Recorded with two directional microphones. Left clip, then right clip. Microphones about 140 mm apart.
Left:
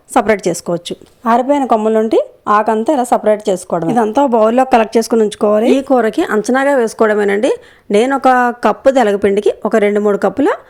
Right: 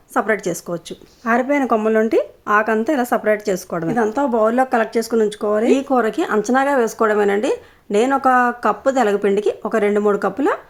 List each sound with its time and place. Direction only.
0.1 s speech: 40° left (ahead or behind)
1.6 s speech: 20° left (ahead or behind)
4.1 s speech: 50° left (ahead or behind)